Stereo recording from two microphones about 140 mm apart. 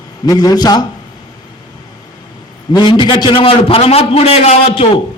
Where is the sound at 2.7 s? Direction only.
35° left (ahead or behind).